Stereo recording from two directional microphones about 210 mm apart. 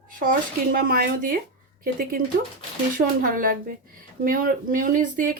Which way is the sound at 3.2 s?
40° right (ahead or behind).